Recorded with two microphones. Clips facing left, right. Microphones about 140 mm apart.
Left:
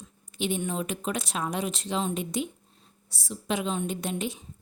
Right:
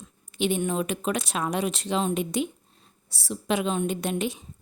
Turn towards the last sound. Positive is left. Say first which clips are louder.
# right 3 dB
turn(degrees=-70)  # may be behind; listen again after turning